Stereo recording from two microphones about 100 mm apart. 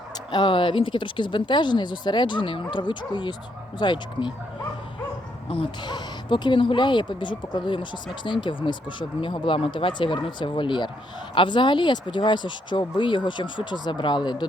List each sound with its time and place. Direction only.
0.3 s speech: 50° left (ahead or behind)
5.5 s speech: 65° left (ahead or behind)
5.9 s speech: 50° left (ahead or behind)